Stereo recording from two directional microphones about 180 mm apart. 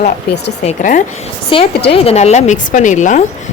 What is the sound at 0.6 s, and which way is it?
Speech, 40° left (ahead or behind).